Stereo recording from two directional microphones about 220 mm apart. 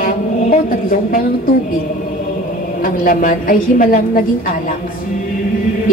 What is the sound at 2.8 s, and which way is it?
Speech, 40° left (ahead or behind).